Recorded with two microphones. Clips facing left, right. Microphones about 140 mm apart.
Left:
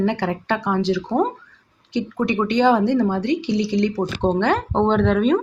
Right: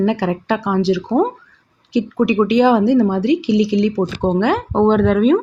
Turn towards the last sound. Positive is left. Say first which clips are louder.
# right 4 dB
turn(degrees=-5)  # may be behind; listen again after turning